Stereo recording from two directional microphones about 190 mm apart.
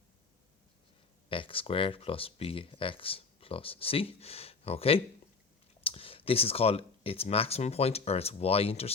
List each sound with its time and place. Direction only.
1.3 s speech: 30° left (ahead or behind)